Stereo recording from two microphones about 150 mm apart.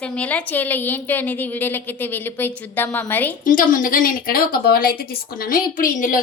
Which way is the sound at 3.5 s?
65° left (ahead or behind).